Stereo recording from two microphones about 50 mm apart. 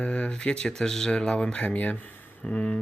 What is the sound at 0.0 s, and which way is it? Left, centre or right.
Speech, left.